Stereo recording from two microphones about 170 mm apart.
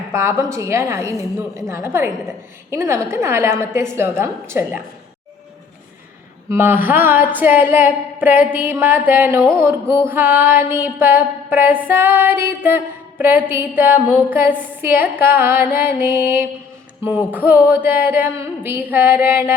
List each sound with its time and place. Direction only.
0.1 s music: 15° right (ahead or behind)
6.5 s music: 10° right (ahead or behind)